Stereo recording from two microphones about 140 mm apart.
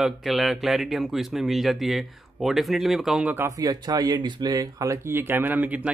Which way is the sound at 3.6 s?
30° right (ahead or behind).